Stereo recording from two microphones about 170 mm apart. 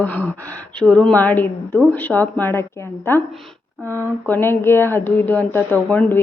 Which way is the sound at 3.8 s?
15° right (ahead or behind).